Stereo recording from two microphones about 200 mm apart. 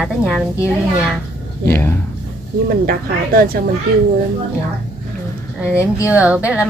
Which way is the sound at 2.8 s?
45° right (ahead or behind).